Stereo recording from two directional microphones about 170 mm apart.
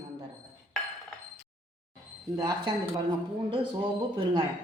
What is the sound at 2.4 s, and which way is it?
Speech, 25° right (ahead or behind).